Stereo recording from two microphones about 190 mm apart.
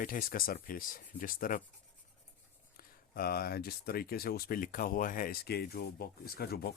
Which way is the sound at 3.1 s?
50° left (ahead or behind).